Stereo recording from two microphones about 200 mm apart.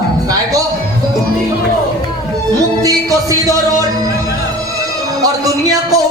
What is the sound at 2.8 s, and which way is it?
Music, 15° right (ahead or behind).